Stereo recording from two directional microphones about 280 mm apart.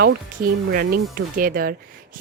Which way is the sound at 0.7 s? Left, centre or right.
Right.